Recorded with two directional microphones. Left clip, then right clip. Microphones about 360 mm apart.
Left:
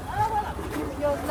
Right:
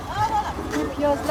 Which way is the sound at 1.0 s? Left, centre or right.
Right.